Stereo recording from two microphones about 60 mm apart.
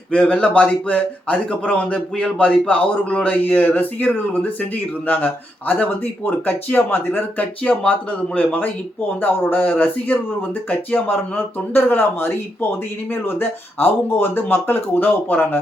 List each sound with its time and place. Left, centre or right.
0.1 s a man's voice: centre; by 7.4 s left
7.7 s a man's voice: left